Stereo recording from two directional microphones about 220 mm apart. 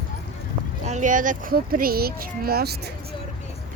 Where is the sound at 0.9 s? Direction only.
35° right (ahead or behind).